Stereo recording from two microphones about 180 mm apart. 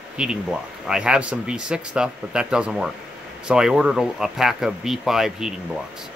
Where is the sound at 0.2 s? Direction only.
5° right (ahead or behind).